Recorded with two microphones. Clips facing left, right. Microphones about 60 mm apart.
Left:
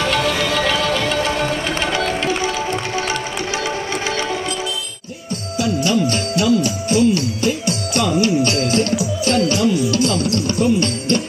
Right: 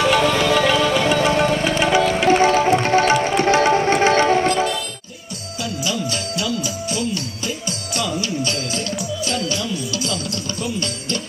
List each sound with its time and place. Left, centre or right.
0.0 s music: centre
2.2 s music: right
5.9 s music: left